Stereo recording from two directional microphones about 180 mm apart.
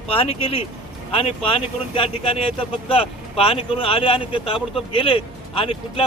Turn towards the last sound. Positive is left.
turn(degrees=30)  # may be behind; listen again after turning